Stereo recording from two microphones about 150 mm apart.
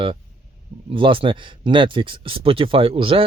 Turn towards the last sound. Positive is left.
turn(degrees=-35)  # may be behind; listen again after turning